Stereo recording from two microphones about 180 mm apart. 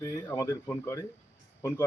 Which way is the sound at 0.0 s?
20° left (ahead or behind).